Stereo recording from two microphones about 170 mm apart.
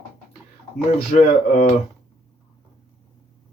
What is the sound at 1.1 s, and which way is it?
Speech, 45° left (ahead or behind).